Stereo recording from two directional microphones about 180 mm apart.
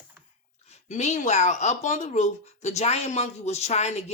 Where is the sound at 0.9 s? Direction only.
40° left (ahead or behind).